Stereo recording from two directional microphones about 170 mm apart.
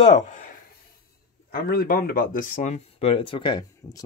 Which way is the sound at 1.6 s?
60° left (ahead or behind).